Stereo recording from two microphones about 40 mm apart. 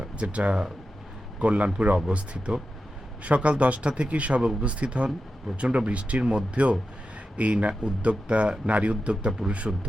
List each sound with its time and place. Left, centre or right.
0.0 s speech: right